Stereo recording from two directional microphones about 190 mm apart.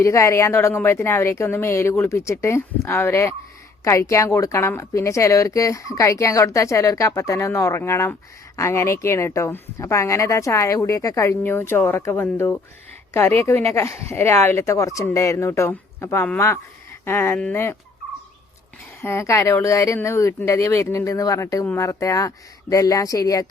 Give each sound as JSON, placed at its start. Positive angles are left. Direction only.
{"t": 0.0, "sound": "a woman's voice", "side_deg": 15}
{"t": 19.0, "sound": "a woman's voice", "side_deg": 15}